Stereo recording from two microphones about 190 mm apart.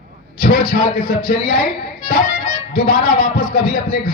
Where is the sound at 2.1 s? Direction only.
45° left (ahead or behind).